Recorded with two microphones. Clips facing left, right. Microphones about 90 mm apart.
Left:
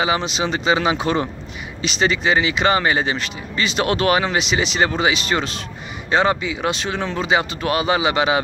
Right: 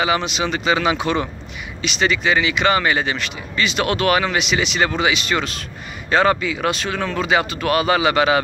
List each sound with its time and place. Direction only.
0.0 s speech: 30° left (ahead or behind)
6.0 s speech: 20° left (ahead or behind)